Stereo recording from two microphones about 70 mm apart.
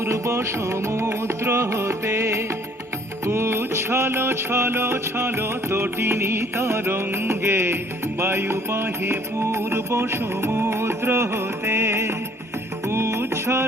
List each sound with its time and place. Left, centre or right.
0.0 s music: right